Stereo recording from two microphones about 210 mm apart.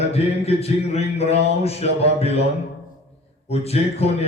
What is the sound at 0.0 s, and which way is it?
Speech, 30° left (ahead or behind).